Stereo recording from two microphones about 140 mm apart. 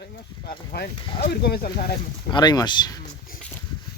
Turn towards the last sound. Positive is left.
turn(degrees=30)  # may be behind; listen again after turning